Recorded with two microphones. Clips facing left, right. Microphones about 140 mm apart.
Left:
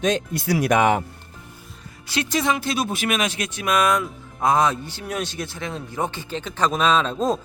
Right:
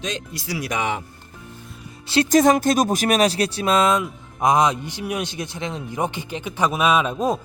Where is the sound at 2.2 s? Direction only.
45° right (ahead or behind).